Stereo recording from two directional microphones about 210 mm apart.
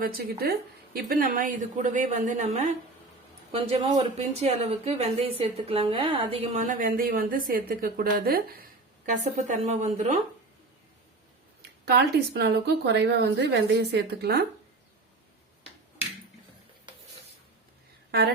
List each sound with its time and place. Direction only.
0.0 s a woman's voice: 45° right (ahead or behind)
9.5 s speech: 35° right (ahead or behind)
11.9 s a woman's voice: 50° right (ahead or behind)